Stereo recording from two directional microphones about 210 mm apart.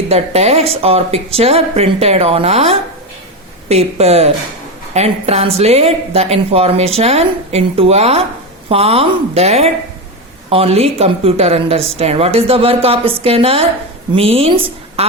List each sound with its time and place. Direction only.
0.1 s a woman's voice: 30° right (ahead or behind)